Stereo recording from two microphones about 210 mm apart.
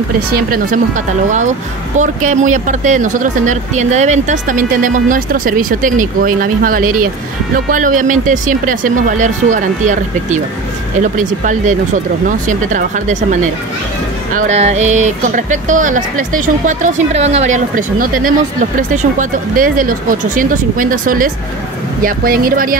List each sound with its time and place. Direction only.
0.3 s speech: 45° right (ahead or behind)
2.0 s speech: 35° right (ahead or behind)